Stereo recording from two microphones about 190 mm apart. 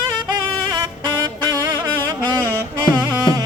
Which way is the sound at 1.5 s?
20° right (ahead or behind).